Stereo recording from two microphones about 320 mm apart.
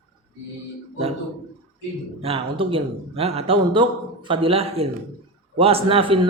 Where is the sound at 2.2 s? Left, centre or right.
Centre.